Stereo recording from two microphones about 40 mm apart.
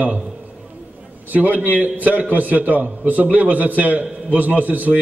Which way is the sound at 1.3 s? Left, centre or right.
Right.